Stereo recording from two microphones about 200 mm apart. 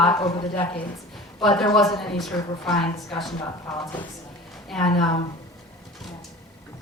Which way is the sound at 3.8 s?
25° left (ahead or behind).